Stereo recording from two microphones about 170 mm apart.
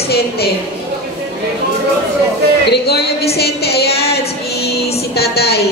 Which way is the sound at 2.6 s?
75° left (ahead or behind).